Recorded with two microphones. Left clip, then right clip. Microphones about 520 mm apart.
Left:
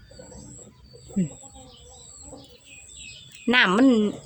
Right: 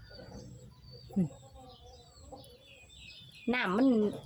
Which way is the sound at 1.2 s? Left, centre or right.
Right.